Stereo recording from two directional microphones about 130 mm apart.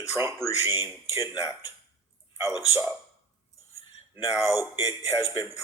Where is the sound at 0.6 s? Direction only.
20° right (ahead or behind).